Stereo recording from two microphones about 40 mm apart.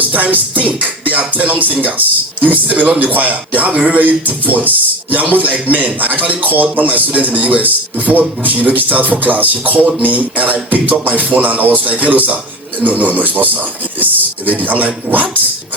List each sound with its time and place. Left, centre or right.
0.0 s speech: right
3.7 s speech: right
7.6 s speech: right